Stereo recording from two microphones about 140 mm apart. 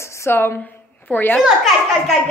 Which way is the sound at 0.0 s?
20° left (ahead or behind).